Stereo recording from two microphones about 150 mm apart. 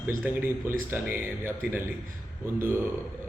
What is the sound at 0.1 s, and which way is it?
A man's voice, 15° right (ahead or behind).